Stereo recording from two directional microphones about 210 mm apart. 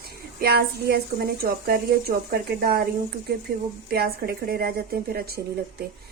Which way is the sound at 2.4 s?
45° right (ahead or behind).